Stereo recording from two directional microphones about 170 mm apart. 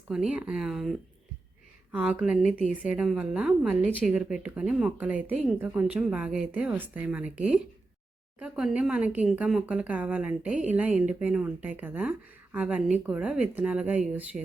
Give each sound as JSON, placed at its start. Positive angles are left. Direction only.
{"t": 0.1, "sound": "speech", "side_deg": -5}